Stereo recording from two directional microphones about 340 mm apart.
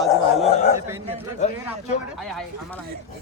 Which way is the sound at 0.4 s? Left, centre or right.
Centre.